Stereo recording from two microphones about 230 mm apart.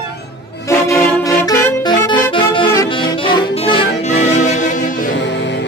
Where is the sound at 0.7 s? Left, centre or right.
Centre.